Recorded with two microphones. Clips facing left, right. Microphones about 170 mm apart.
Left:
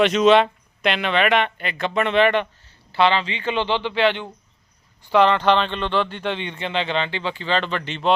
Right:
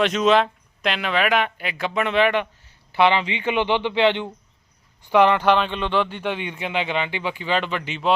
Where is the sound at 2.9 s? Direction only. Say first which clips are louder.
Right 1 dB; 15° right (ahead or behind).